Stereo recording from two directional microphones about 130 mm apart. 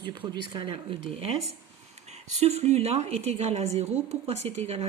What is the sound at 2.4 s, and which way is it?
A woman's voice, 55° right (ahead or behind).